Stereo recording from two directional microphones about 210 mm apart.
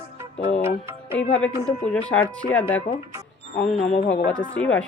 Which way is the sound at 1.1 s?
5° left (ahead or behind).